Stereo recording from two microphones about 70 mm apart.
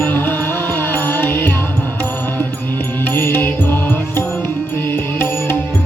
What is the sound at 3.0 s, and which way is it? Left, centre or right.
Music, left.